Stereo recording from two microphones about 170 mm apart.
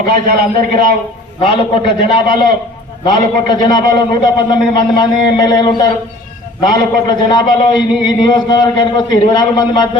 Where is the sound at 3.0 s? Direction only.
25° left (ahead or behind).